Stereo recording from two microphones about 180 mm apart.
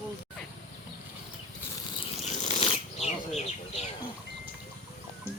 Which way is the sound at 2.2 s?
40° left (ahead or behind).